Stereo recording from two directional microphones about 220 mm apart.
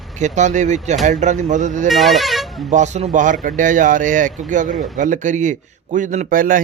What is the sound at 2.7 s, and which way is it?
A man's voice, 30° right (ahead or behind).